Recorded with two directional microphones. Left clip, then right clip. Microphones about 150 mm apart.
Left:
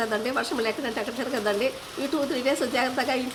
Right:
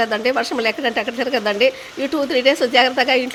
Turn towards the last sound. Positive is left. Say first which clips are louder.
# right 10 dB
turn(degrees=-35)  # may be behind; listen again after turning